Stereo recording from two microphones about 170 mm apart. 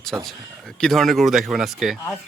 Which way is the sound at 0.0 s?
Centre (ahead or behind).